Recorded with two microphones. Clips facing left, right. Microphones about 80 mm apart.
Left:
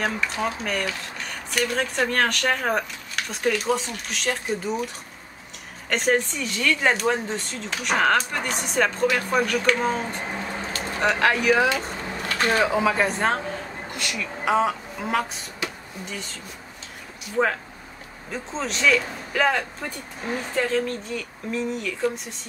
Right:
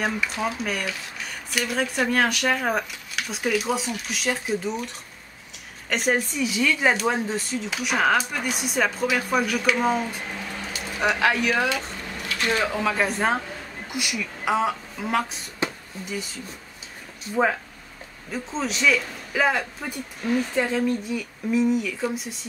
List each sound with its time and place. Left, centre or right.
0.0 s speech: centre
10.2 s a sound: left
11.0 s speech: centre
12.0 s a sound: left
12.6 s speech: centre
12.9 s speech: centre
17.4 s speech: centre